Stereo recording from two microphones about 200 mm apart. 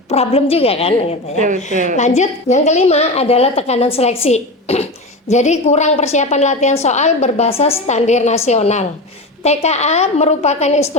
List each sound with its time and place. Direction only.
0.1 s a woman's voice: 30° left (ahead or behind)
1.7 s a woman's voice: 40° right (ahead or behind)
2.0 s a woman's voice: 35° left (ahead or behind)